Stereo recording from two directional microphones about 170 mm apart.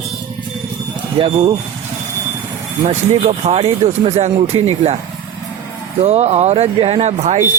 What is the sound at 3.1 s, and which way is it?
Speech, 40° right (ahead or behind).